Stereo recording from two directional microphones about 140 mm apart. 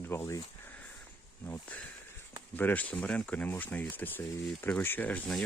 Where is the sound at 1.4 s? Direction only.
20° left (ahead or behind).